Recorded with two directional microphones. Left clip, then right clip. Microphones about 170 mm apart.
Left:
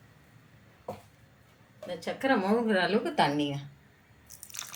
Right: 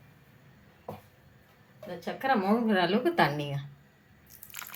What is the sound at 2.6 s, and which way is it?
Speech, 15° right (ahead or behind).